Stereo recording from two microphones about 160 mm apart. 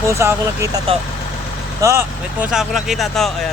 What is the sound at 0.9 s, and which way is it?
Speech, 35° right (ahead or behind).